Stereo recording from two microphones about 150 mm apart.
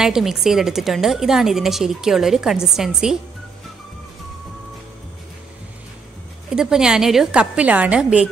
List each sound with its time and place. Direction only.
0.0 s a woman's voice: 5° right (ahead or behind)
6.5 s a woman's voice: 5° right (ahead or behind)